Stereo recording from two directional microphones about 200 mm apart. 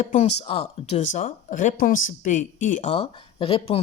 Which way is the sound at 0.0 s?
35° left (ahead or behind).